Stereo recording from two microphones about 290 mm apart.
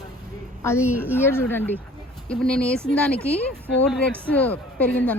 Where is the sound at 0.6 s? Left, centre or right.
Centre.